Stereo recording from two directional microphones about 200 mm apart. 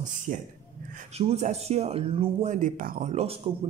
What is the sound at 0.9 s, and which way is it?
Speech, 35° right (ahead or behind).